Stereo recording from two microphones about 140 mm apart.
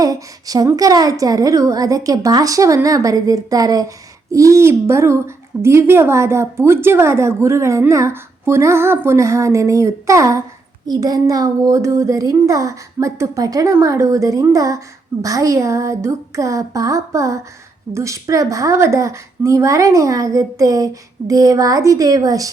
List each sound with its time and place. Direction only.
0.0 s a woman's voice: 25° right (ahead or behind)